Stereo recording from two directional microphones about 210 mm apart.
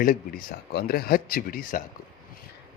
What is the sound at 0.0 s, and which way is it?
Speech, 40° left (ahead or behind).